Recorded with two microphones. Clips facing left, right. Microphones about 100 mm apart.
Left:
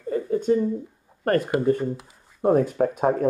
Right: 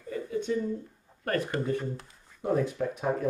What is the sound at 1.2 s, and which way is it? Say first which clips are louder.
Speech: left 9 dB; 45° left (ahead or behind).